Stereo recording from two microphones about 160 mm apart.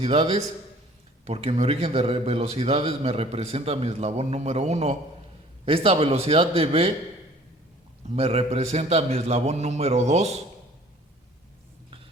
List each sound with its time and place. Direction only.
0.0 s a man's voice: 35° right (ahead or behind)
8.0 s a man's voice: 40° right (ahead or behind)